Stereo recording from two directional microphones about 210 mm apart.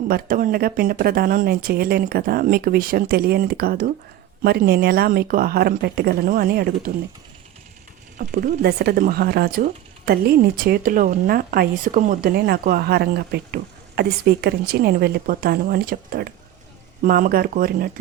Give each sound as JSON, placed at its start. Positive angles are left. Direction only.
{"t": 0.1, "sound": "a woman's voice", "side_deg": -45}
{"t": 8.2, "sound": "a woman's voice", "side_deg": -40}